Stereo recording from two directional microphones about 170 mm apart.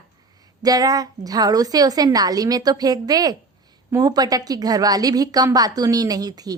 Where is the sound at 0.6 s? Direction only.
20° right (ahead or behind).